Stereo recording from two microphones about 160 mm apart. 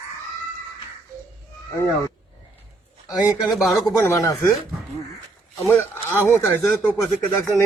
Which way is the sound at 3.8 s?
20° left (ahead or behind).